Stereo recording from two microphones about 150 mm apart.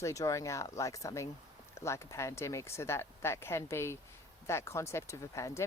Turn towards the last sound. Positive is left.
turn(degrees=20)  # may be behind; listen again after turning